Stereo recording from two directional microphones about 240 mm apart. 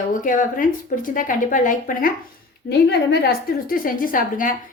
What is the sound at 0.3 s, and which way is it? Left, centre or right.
A woman's voice, left.